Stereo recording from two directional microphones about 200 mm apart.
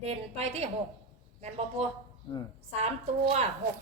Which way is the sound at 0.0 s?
30° right (ahead or behind).